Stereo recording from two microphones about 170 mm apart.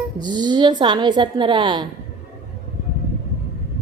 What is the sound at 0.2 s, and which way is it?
A woman's voice, 25° right (ahead or behind).